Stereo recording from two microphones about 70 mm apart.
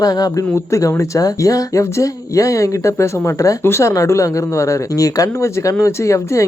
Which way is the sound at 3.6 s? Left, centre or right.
Left.